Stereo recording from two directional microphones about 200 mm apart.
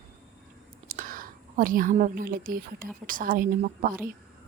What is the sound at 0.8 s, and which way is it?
A woman's voice, 45° right (ahead or behind).